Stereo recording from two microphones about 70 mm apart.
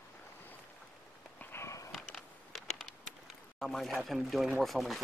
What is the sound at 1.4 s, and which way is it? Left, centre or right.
Walk, left.